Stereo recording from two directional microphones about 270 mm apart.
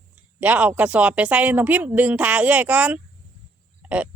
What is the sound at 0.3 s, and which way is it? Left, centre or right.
Speech, centre.